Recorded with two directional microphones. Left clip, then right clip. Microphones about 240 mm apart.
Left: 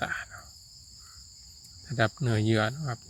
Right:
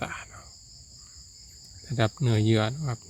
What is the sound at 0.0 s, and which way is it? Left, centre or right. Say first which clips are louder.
Insect: left 3 dB; centre.